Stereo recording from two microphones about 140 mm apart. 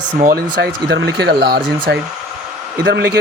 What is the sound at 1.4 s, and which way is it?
Speech, 90° right.